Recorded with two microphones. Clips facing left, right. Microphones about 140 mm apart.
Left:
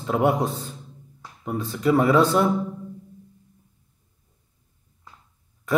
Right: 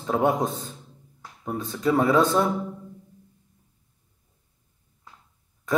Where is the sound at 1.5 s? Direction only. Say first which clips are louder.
Left 2 dB; 25° right (ahead or behind).